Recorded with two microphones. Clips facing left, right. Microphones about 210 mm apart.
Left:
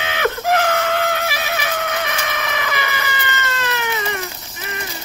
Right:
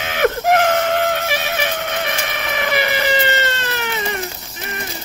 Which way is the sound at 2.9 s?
35° right (ahead or behind).